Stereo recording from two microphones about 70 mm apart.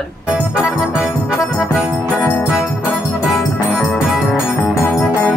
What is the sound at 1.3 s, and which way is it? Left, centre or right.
Speech, centre.